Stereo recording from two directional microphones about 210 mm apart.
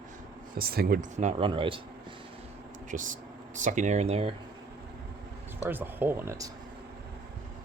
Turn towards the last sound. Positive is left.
turn(degrees=-15)  # may be behind; listen again after turning